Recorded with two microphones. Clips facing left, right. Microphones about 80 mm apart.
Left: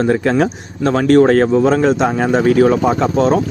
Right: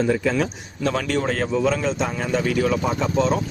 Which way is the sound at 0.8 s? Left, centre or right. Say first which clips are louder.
Left 12 dB; left.